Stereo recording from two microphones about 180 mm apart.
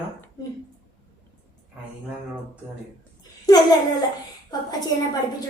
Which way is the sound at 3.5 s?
20° left (ahead or behind).